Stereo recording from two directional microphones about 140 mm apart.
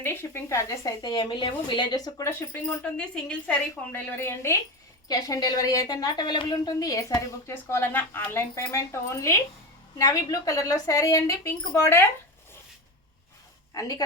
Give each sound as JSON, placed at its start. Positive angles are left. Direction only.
{"t": 0.0, "sound": "a woman's voice", "side_deg": 15}